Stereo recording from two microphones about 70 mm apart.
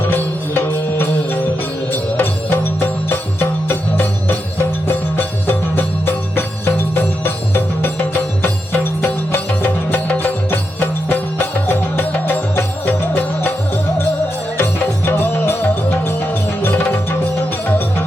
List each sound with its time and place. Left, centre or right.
0.0 s music: left
14.6 s music: left